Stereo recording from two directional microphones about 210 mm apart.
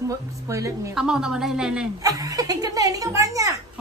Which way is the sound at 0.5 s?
15° right (ahead or behind).